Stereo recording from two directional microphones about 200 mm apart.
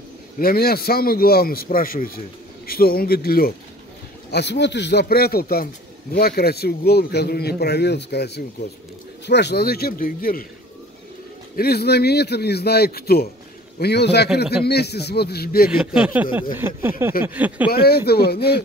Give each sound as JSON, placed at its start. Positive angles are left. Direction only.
{"t": 0.4, "sound": "a man's voice", "side_deg": 50}
{"t": 11.5, "sound": "a man's voice", "side_deg": 50}
{"t": 15.8, "sound": "speech", "side_deg": -5}
{"t": 17.6, "sound": "a man's voice", "side_deg": 50}